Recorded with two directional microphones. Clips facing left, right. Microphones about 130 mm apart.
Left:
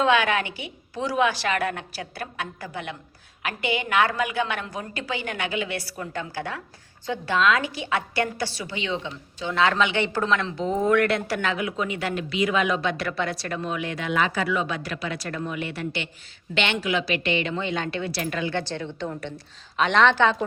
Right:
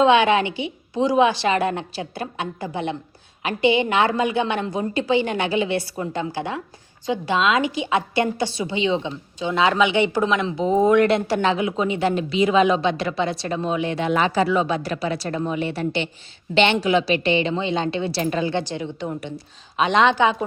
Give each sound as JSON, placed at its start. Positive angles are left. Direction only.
{"t": 0.0, "sound": "a woman's voice", "side_deg": -25}
{"t": 18.6, "sound": "a woman's voice", "side_deg": -15}